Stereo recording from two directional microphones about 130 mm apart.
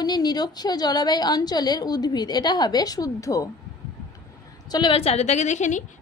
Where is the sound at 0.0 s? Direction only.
30° left (ahead or behind).